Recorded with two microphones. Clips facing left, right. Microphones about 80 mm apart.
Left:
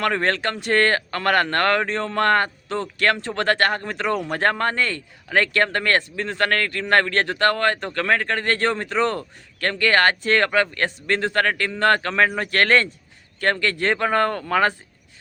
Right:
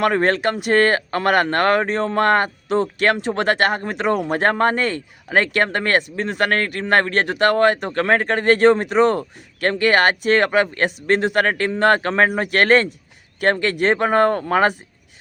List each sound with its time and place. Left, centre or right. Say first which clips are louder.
0.0 s speech: right 4 dB; centre
3.8 s speech: right 4 dB; right